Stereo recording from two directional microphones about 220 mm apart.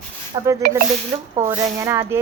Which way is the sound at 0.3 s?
20° right (ahead or behind).